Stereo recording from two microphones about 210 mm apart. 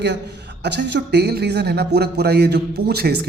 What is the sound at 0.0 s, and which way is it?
A man's voice, 55° right (ahead or behind).